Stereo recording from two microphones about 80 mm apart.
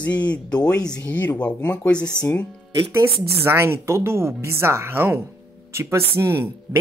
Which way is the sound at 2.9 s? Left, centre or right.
Right.